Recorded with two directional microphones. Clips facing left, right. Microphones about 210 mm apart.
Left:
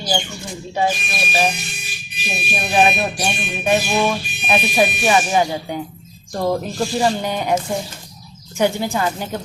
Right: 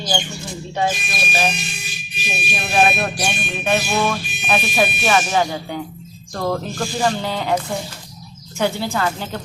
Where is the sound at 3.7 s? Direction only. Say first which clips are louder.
Left 2 dB; 15° left (ahead or behind).